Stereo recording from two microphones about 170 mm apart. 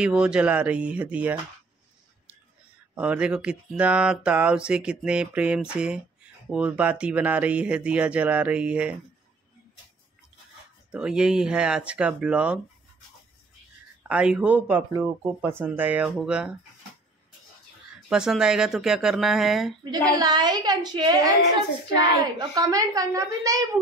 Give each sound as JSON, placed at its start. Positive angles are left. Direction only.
{"t": 0.0, "sound": "speech", "side_deg": -5}
{"t": 2.9, "sound": "speech", "side_deg": -5}
{"t": 10.9, "sound": "speech", "side_deg": -5}
{"t": 14.0, "sound": "speech", "side_deg": -5}
{"t": 18.1, "sound": "speech", "side_deg": -5}
{"t": 19.8, "sound": "a woman's voice", "side_deg": -25}
{"t": 22.4, "sound": "a woman's voice", "side_deg": -20}